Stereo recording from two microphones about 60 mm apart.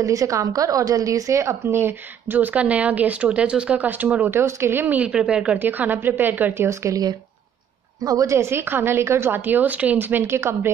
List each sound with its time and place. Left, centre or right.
0.0 s a woman's voice: right
1.4 s speech: right
4.3 s a woman's voice: right
5.0 s speech: centre
5.6 s a woman's voice: right
6.7 s speech: right
8.1 s a woman's voice: right
8.4 s a woman's voice: right